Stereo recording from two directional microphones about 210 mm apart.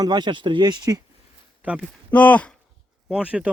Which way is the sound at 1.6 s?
5° right (ahead or behind).